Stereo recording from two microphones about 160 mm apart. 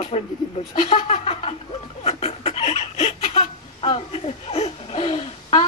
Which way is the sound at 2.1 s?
40° left (ahead or behind).